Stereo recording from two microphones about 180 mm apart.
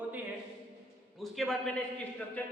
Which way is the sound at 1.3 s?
Centre (ahead or behind).